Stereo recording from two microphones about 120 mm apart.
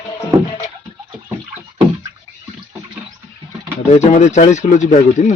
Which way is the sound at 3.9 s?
75° left (ahead or behind).